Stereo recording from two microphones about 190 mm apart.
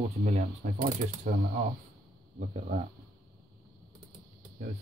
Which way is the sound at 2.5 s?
30° right (ahead or behind).